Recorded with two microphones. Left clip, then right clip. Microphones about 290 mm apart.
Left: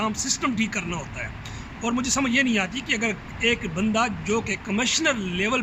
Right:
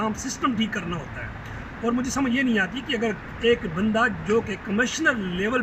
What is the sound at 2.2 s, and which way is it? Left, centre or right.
A man's voice, centre.